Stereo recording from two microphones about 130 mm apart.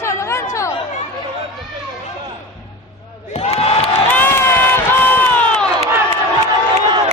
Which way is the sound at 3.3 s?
55° left (ahead or behind).